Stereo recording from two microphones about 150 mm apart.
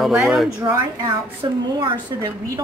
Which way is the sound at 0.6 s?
25° right (ahead or behind).